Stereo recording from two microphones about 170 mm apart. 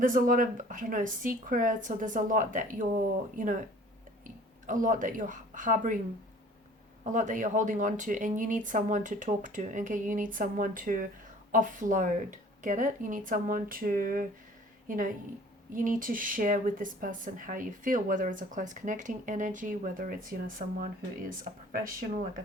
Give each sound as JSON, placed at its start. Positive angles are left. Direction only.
{"t": 0.0, "sound": "speech", "side_deg": -55}
{"t": 4.6, "sound": "speech", "side_deg": -50}
{"t": 7.0, "sound": "a woman's voice", "side_deg": -50}